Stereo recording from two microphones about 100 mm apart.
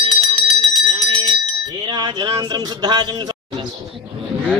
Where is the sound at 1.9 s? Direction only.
45° right (ahead or behind).